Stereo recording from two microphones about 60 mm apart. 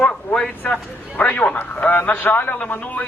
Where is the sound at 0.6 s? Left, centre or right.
Left.